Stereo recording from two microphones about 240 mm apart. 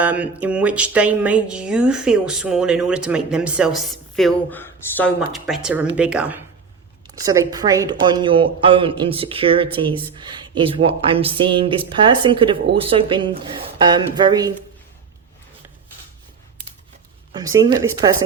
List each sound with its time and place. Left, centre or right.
0.0 s a woman's voice: centre
17.3 s speech: centre